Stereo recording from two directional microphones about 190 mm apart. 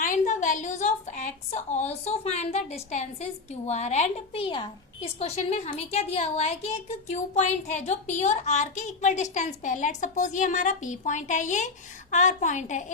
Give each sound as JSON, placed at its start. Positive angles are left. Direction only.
{"t": 0.0, "sound": "a woman's voice", "side_deg": 40}